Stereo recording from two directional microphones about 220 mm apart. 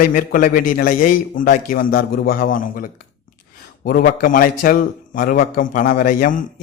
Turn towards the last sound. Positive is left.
turn(degrees=35)  # may be behind; listen again after turning